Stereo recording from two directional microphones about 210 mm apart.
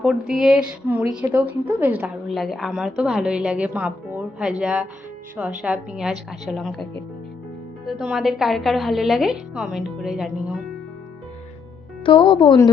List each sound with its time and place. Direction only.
0.0 s a woman's voice: 5° right (ahead or behind)
7.9 s a woman's voice: centre (ahead or behind)
12.0 s a woman's voice: 25° left (ahead or behind)